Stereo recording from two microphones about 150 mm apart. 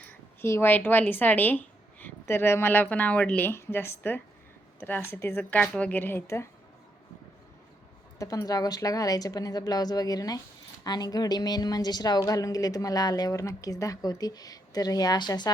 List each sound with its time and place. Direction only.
0.0 s speech: 15° left (ahead or behind)
8.2 s a woman's voice: 20° left (ahead or behind)